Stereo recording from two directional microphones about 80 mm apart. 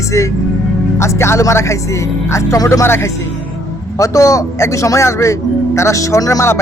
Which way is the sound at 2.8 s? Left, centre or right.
Left.